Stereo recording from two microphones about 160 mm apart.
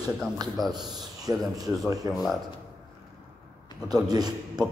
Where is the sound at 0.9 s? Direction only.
25° right (ahead or behind).